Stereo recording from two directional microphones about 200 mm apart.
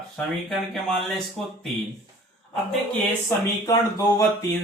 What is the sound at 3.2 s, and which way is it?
Speech, 15° left (ahead or behind).